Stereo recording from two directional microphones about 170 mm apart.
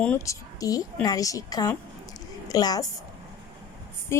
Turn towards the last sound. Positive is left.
turn(degrees=15)  # may be behind; listen again after turning